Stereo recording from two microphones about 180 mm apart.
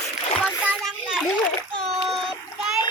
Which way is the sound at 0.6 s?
Centre (ahead or behind).